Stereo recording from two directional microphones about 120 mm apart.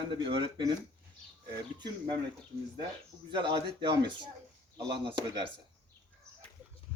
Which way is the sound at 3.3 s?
40° right (ahead or behind).